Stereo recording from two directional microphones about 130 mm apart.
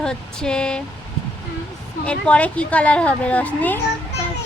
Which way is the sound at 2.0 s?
10° left (ahead or behind).